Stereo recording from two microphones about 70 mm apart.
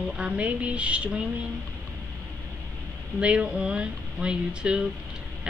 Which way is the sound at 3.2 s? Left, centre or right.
Centre.